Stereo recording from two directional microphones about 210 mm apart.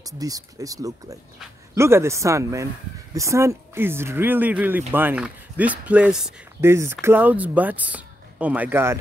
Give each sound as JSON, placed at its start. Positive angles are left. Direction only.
{"t": 0.0, "sound": "speech", "side_deg": -15}